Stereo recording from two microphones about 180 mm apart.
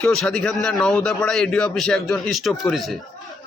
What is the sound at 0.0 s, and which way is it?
A man's voice, 5° left (ahead or behind).